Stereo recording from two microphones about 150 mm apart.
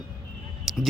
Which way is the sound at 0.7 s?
Centre (ahead or behind).